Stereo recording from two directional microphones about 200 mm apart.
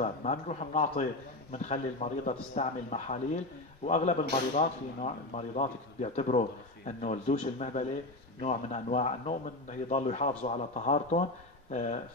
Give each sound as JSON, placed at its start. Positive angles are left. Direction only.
{"t": 0.0, "sound": "speech", "side_deg": 35}